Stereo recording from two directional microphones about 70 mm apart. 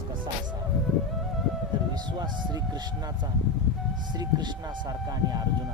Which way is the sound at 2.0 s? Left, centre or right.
Right.